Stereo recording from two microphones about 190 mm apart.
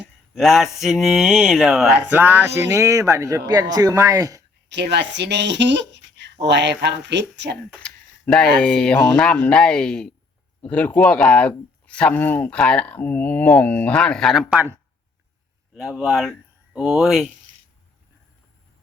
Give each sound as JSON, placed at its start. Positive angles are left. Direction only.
{"t": 0.3, "sound": "speech", "side_deg": 0}
{"t": 4.7, "sound": "speech", "side_deg": -65}
{"t": 7.5, "sound": "speech", "side_deg": 5}